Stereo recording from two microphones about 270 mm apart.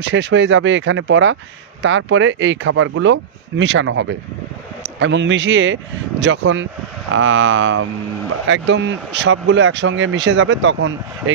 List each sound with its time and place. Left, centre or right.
0.0 s speech: right